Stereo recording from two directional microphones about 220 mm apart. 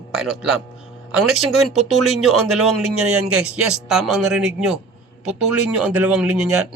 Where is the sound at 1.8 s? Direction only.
90° right.